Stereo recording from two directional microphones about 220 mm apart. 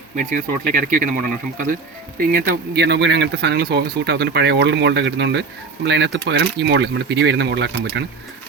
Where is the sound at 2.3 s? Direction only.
40° right (ahead or behind).